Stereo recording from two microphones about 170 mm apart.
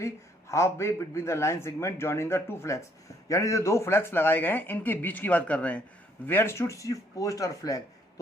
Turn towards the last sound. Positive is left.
turn(degrees=20)  # may be behind; listen again after turning